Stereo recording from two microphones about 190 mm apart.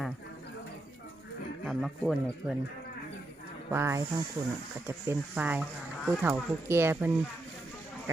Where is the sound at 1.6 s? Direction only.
Centre (ahead or behind).